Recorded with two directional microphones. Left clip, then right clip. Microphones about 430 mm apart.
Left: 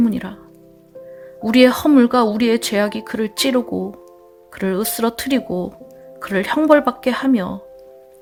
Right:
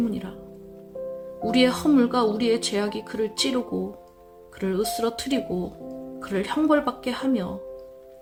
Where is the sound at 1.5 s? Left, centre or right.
Left.